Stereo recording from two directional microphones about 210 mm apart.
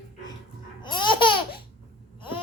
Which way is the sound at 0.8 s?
20° left (ahead or behind).